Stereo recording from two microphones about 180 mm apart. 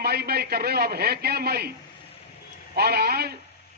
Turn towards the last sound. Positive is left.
turn(degrees=-60)  # may be behind; listen again after turning